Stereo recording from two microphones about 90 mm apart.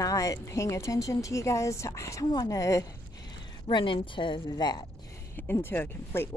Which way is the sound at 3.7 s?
60° left (ahead or behind).